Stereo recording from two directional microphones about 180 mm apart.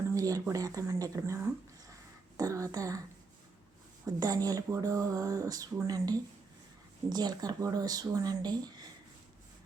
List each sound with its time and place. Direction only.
0.1 s speech: 20° right (ahead or behind)
4.0 s speech: 20° right (ahead or behind)